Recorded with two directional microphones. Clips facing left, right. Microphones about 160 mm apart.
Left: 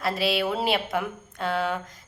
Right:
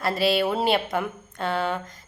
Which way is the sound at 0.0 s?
Centre (ahead or behind).